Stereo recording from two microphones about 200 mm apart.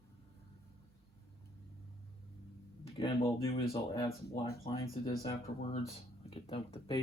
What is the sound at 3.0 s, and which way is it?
Speech, 30° left (ahead or behind).